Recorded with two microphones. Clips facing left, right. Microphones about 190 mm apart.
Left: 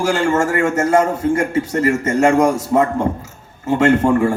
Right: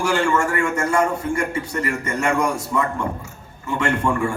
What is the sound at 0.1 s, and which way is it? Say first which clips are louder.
A man's voice: left 3 dB; 40° left (ahead or behind).